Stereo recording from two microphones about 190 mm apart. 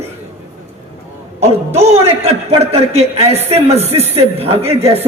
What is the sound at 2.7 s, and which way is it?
Speech, 35° right (ahead or behind).